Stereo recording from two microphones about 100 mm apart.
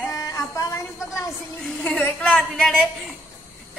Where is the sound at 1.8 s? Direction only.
15° left (ahead or behind).